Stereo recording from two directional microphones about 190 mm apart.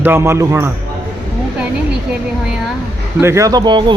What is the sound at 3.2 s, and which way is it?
Speech, 15° right (ahead or behind).